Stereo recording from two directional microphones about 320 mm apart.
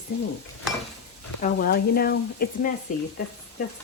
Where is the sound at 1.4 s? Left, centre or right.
Left.